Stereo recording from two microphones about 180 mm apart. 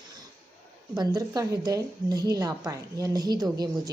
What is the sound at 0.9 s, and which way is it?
A woman's voice, 20° right (ahead or behind).